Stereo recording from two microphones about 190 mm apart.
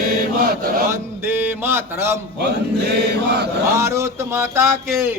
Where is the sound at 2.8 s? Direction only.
60° right (ahead or behind).